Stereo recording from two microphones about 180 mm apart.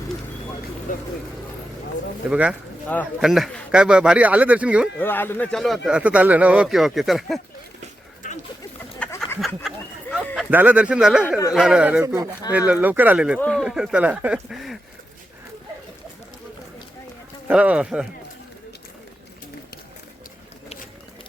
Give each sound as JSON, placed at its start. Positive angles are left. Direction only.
{"t": 2.3, "sound": "speech", "side_deg": -5}
{"t": 4.9, "sound": "speech", "side_deg": 10}
{"t": 9.0, "sound": "a sound", "side_deg": 15}
{"t": 10.3, "sound": "speech", "side_deg": -10}
{"t": 12.0, "sound": "speech", "side_deg": -20}
{"t": 17.5, "sound": "speech", "side_deg": -5}